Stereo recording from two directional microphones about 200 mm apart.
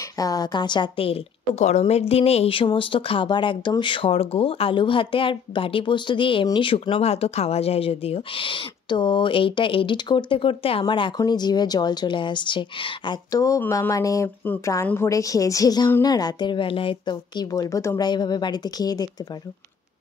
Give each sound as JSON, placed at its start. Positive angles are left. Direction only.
{"t": 0.2, "sound": "a woman's voice", "side_deg": 20}